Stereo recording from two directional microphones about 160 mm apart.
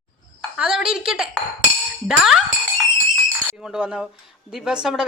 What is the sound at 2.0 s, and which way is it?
Speech, centre (ahead or behind).